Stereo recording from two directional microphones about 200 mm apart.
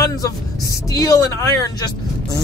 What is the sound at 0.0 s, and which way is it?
Speech, 15° left (ahead or behind).